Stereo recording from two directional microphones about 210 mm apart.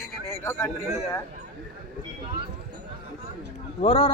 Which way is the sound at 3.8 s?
30° left (ahead or behind).